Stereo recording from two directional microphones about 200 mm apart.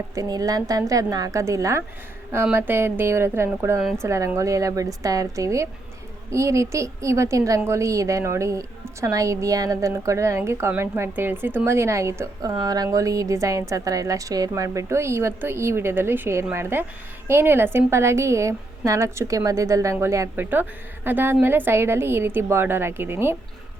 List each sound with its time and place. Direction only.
0.1 s a woman's voice: 15° right (ahead or behind)
3.8 s a woman's voice: centre (ahead or behind)
4.0 s a woman's voice: 15° right (ahead or behind)